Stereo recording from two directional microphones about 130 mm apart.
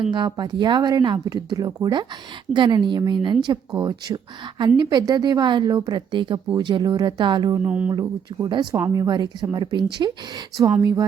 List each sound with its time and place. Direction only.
0.1 s a woman's voice: 35° right (ahead or behind)
7.6 s speech: 10° right (ahead or behind)
7.9 s a woman's voice: 35° right (ahead or behind)